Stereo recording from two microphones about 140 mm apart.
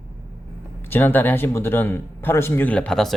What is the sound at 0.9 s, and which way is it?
Speech, 15° left (ahead or behind).